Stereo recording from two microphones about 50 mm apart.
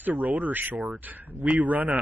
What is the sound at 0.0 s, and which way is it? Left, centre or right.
Speech, right.